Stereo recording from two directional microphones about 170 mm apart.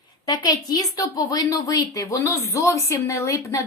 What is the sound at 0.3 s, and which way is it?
A woman's voice, 25° left (ahead or behind).